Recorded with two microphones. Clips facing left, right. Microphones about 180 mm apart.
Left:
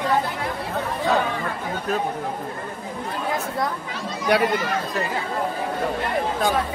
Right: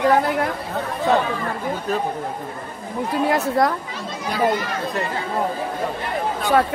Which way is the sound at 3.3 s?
75° right (ahead or behind).